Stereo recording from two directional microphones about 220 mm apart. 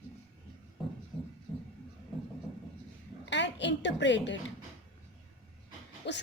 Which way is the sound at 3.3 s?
55° left (ahead or behind).